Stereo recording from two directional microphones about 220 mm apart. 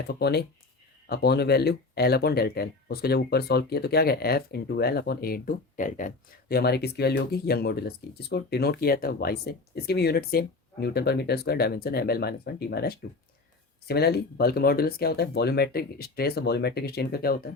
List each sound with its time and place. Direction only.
0.1 s speech: 45° left (ahead or behind)